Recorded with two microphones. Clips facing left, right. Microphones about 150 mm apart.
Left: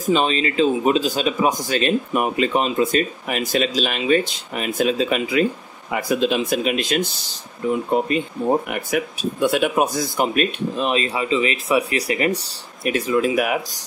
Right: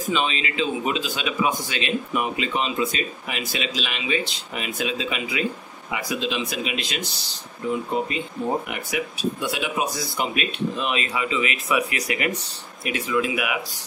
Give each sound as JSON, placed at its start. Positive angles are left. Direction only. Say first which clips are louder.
{"t": 0.0, "sound": "speech", "louder": "left 6 dB", "side_deg": 40}